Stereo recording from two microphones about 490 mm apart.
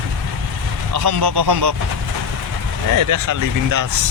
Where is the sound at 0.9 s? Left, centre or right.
Right.